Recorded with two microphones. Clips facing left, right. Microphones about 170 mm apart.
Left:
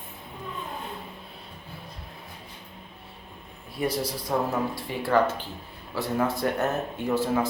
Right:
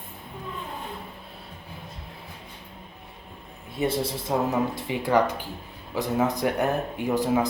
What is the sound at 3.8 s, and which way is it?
Speech, 25° right (ahead or behind).